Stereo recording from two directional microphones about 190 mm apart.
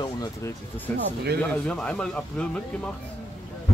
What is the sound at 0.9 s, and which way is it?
Speech, 10° left (ahead or behind).